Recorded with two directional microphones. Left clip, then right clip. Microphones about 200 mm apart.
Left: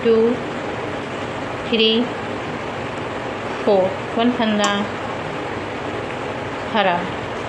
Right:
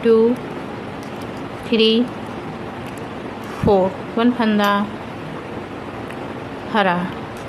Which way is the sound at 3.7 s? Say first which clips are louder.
Right 1 dB; 40° right (ahead or behind).